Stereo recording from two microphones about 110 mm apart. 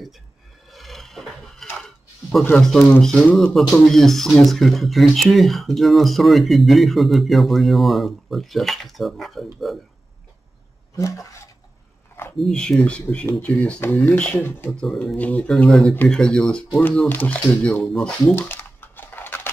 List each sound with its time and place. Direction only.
0.7 s a sound: centre (ahead or behind)
2.7 s speech: 5° left (ahead or behind)
11.0 s a sound: 30° left (ahead or behind)
12.4 s speech: 5° left (ahead or behind)
14.8 s speech: 5° left (ahead or behind)
15.5 s speech: centre (ahead or behind)
17.1 s speech: 15° left (ahead or behind)
17.8 s speech: 5° left (ahead or behind)
18.3 s crumpling: 15° left (ahead or behind)